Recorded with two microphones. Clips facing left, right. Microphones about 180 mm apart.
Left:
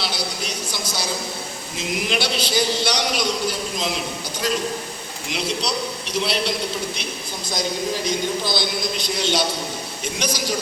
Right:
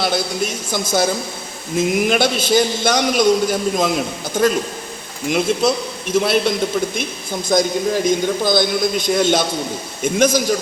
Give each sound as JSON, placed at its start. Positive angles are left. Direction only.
{"t": 0.0, "sound": "a man's voice", "side_deg": -50}